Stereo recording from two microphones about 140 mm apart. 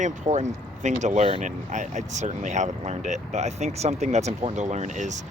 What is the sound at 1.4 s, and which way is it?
Speech, 60° right (ahead or behind).